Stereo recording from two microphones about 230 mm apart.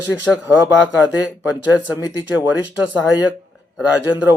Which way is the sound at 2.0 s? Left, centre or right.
Centre.